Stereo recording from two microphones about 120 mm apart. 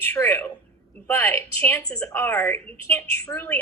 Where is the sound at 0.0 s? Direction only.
15° left (ahead or behind).